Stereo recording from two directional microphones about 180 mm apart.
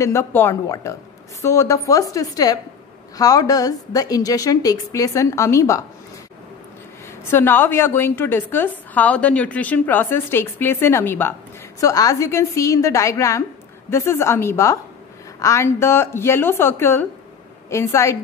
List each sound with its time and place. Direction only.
0.0 s a woman's voice: 15° left (ahead or behind)
7.2 s a woman's voice: 10° left (ahead or behind)